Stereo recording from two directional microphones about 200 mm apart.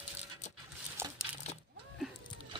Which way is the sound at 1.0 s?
10° right (ahead or behind).